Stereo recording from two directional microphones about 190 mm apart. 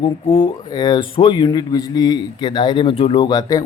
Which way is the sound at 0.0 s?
30° left (ahead or behind).